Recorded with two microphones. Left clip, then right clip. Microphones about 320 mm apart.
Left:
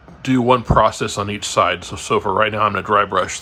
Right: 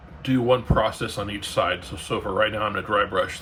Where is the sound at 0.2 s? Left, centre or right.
Left.